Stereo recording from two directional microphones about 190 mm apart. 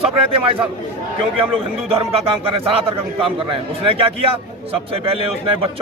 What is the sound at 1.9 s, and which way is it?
A man's voice, 30° right (ahead or behind).